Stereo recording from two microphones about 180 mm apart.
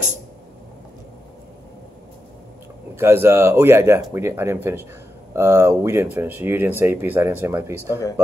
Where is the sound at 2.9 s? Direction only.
15° right (ahead or behind).